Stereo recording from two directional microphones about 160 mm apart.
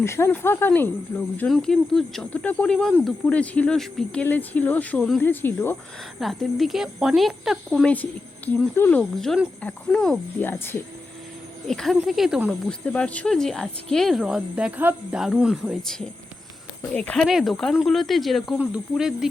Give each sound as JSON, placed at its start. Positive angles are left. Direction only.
{"t": 0.0, "sound": "speech", "side_deg": 15}
{"t": 1.5, "sound": "speech", "side_deg": 0}
{"t": 6.1, "sound": "speech", "side_deg": 0}
{"t": 11.7, "sound": "speech", "side_deg": 0}
{"t": 12.9, "sound": "speech", "side_deg": 10}